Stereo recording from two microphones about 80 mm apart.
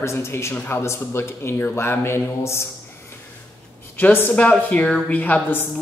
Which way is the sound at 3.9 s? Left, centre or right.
Left.